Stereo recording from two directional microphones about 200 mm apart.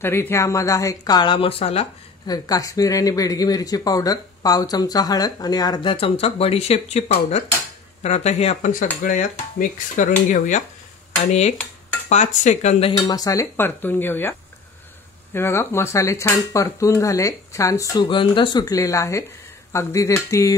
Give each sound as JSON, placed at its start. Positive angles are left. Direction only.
{"t": 0.0, "sound": "speech", "side_deg": 10}
{"t": 2.3, "sound": "speech", "side_deg": 20}
{"t": 12.1, "sound": "speech", "side_deg": 35}
{"t": 15.3, "sound": "speech", "side_deg": 10}